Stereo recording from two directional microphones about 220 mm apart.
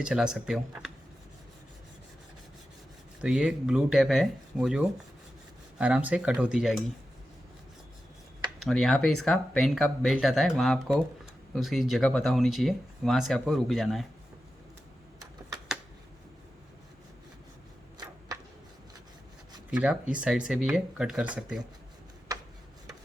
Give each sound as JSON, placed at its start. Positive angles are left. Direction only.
{"t": 0.0, "sound": "speech", "side_deg": -5}
{"t": 3.2, "sound": "speech", "side_deg": -5}
{"t": 8.6, "sound": "speech", "side_deg": 0}
{"t": 17.9, "sound": "a sound", "side_deg": -15}
{"t": 19.7, "sound": "speech", "side_deg": -5}
{"t": 22.3, "sound": "a sound", "side_deg": -15}